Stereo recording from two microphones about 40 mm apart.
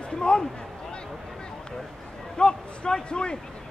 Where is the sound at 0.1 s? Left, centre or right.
Left.